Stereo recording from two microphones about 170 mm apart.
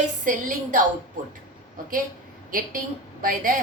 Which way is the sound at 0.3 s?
50° right (ahead or behind).